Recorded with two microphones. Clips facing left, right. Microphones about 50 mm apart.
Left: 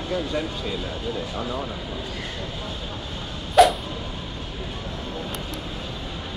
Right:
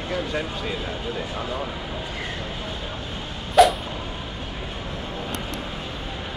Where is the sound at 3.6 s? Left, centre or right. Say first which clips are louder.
Even; centre.